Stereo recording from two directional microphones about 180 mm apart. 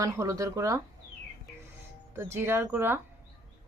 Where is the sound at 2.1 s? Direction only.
15° right (ahead or behind).